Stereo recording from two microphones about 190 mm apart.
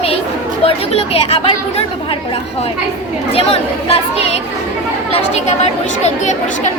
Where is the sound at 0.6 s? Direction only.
30° left (ahead or behind).